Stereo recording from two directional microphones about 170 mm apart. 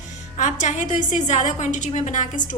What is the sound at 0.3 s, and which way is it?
A woman's voice, 45° left (ahead or behind).